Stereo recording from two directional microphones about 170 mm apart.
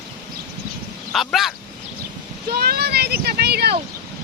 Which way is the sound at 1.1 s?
Centre (ahead or behind).